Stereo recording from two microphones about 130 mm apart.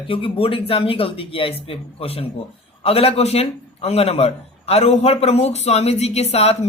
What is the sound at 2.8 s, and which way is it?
A man's voice, 50° left (ahead or behind).